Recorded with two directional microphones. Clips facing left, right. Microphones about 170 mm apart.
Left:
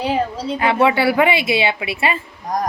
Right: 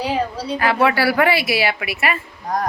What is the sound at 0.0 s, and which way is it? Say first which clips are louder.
A woman's voice: left 2 dB; 20° left (ahead or behind).